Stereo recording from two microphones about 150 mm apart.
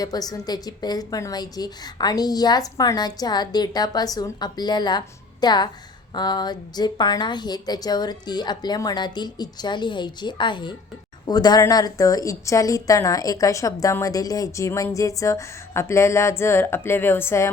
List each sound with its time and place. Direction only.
0.0 s a woman's voice: 25° left (ahead or behind)